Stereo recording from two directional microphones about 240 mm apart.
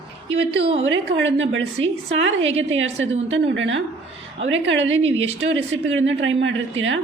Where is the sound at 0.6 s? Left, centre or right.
Right.